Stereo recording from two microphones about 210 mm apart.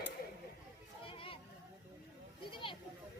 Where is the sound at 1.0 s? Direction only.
25° left (ahead or behind).